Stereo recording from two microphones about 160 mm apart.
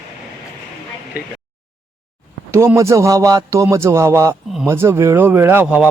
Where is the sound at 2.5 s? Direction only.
15° right (ahead or behind).